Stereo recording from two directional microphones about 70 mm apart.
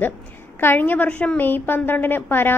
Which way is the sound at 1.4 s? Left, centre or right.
Left.